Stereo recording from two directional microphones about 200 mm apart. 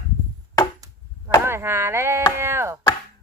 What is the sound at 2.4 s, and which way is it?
Chop, 15° right (ahead or behind).